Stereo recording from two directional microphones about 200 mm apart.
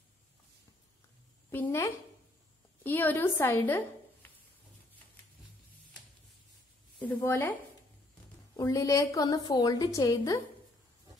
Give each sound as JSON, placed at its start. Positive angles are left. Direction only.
{"t": 1.5, "sound": "a woman's voice", "side_deg": 10}
{"t": 7.0, "sound": "a woman's voice", "side_deg": 10}
{"t": 8.5, "sound": "a woman's voice", "side_deg": 15}